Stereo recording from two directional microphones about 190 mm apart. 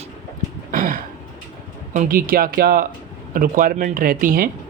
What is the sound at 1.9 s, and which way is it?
Speech, 45° right (ahead or behind).